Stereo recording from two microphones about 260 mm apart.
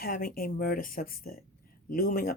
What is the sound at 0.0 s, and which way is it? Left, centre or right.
Speech, left.